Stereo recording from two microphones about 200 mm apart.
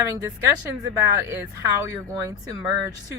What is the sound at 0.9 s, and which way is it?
Speech, 15° right (ahead or behind).